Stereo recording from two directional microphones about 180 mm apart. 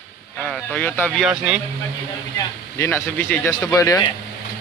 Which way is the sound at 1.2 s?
5° right (ahead or behind).